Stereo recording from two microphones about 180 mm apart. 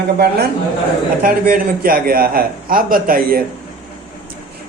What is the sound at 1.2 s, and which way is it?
A man's voice, 50° right (ahead or behind).